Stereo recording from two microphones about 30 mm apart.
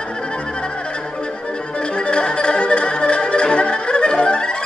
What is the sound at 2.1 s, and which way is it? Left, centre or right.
Music, left.